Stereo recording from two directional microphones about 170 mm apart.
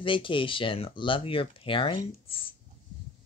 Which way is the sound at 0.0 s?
30° left (ahead or behind).